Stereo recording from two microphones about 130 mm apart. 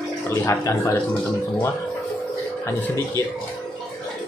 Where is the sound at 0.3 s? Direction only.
25° left (ahead or behind).